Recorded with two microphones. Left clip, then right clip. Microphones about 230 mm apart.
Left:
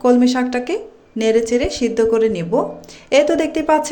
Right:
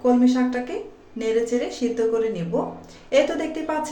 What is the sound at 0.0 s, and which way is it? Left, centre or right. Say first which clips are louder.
Speech: left 5 dB; left.